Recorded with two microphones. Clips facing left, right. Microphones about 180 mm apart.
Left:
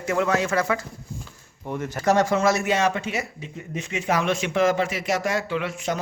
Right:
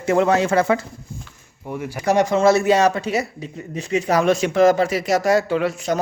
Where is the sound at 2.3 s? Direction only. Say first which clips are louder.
Right 6 dB; 30° right (ahead or behind).